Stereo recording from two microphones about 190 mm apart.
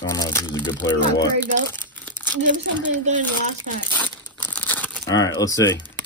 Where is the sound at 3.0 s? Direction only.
40° right (ahead or behind).